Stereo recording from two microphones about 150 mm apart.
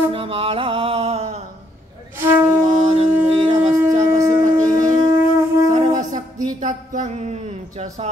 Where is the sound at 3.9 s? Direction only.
60° right (ahead or behind).